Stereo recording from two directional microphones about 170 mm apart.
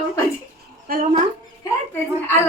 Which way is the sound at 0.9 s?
55° right (ahead or behind).